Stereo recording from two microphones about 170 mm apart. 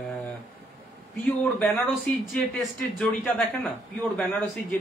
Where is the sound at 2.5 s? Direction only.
10° left (ahead or behind).